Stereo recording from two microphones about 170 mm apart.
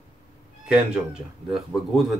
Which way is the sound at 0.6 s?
5° right (ahead or behind).